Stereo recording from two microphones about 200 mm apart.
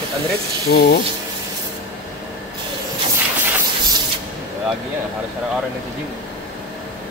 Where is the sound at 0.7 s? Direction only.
50° left (ahead or behind).